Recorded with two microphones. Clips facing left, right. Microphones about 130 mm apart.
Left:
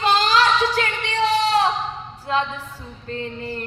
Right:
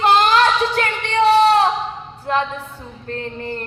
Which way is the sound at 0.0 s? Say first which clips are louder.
Right 4 dB; 60° right (ahead or behind).